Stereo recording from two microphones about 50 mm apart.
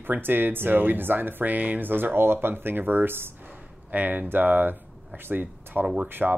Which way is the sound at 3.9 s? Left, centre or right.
Right.